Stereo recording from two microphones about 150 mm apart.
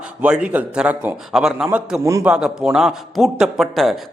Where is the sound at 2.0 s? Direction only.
20° right (ahead or behind).